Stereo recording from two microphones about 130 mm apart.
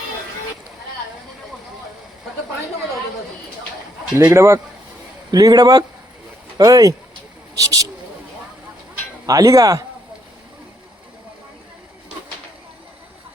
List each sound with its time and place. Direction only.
4.2 s speech: 20° right (ahead or behind)
9.2 s speech: 25° right (ahead or behind)